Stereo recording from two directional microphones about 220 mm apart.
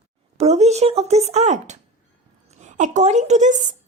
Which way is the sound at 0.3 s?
30° right (ahead or behind).